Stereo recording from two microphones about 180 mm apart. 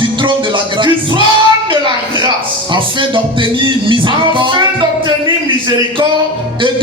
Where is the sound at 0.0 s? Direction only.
25° right (ahead or behind).